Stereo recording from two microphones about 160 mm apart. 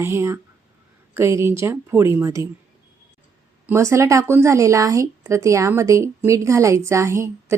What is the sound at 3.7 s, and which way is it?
A woman's voice, 20° right (ahead or behind).